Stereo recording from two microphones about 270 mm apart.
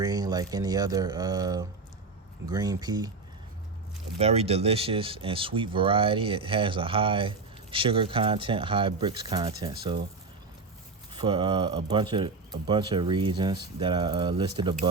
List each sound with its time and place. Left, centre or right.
0.0 s speech: centre
4.2 s speech: right
11.1 s speech: centre